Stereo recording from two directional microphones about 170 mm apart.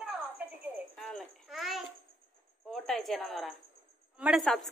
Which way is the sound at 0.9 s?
5° left (ahead or behind).